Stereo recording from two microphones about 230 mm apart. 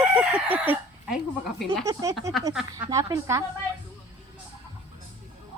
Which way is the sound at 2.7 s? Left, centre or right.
Centre.